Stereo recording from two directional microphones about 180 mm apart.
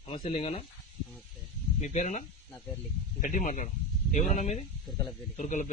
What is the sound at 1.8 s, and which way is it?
A man's voice, 40° left (ahead or behind).